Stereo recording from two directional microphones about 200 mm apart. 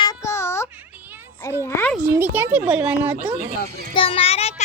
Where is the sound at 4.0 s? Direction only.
30° left (ahead or behind).